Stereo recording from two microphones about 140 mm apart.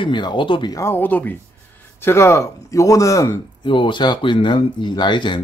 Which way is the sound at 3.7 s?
35° left (ahead or behind).